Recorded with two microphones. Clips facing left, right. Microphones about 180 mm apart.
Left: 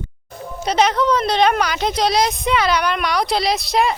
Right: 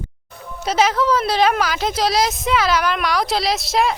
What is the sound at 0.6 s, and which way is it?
Speech, 5° right (ahead or behind).